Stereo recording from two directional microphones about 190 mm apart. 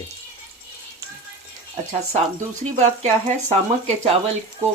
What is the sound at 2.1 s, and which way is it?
Speech, 40° right (ahead or behind).